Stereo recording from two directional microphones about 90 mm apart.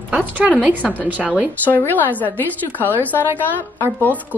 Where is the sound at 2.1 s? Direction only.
20° left (ahead or behind).